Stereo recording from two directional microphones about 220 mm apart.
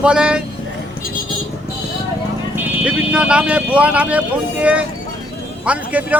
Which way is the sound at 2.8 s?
5° right (ahead or behind).